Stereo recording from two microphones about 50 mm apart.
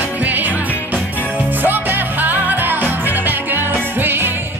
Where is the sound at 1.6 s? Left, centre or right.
Right.